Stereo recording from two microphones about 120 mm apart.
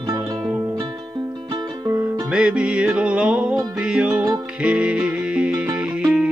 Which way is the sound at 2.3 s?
10° right (ahead or behind).